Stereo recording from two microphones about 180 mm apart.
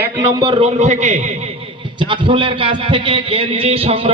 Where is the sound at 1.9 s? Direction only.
25° right (ahead or behind).